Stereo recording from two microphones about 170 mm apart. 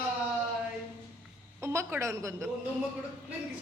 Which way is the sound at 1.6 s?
15° right (ahead or behind).